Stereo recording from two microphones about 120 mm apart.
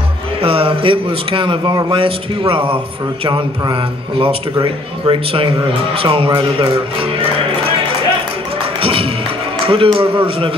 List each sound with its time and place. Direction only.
0.4 s speech: 50° right (ahead or behind)
8.8 s music: 50° right (ahead or behind)
9.7 s speech: 50° right (ahead or behind)